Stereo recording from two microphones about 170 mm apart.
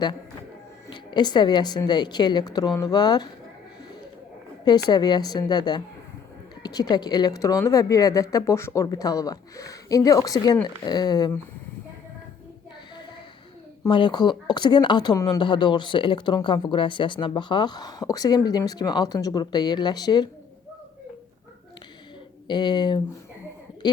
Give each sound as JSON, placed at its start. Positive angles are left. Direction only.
{"t": 0.9, "sound": "speech", "side_deg": 25}
{"t": 4.6, "sound": "speech", "side_deg": 25}
{"t": 13.8, "sound": "speech", "side_deg": 25}
{"t": 22.4, "sound": "speech", "side_deg": 25}